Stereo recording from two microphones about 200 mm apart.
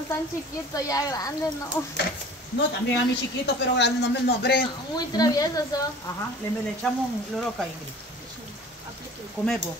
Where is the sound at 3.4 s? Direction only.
55° left (ahead or behind).